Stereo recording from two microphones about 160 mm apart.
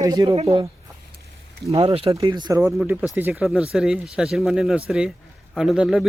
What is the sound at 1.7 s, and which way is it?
Speech, 35° right (ahead or behind).